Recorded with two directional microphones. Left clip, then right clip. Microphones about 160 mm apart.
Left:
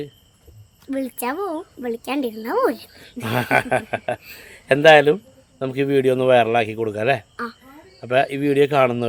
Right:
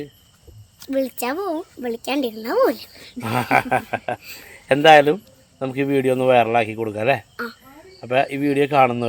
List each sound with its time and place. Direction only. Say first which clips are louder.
0.9 s speech: right 3 dB; 5° left (ahead or behind)
3.2 s a man's voice: right 1 dB; 25° left (ahead or behind)